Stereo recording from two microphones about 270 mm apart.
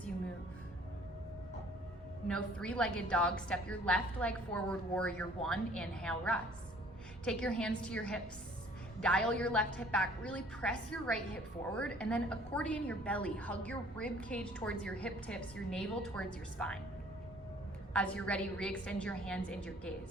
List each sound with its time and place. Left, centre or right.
2.2 s a woman's voice: centre
17.9 s a woman's voice: centre